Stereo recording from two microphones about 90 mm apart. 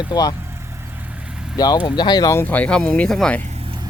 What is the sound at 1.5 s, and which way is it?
Speech, 45° left (ahead or behind).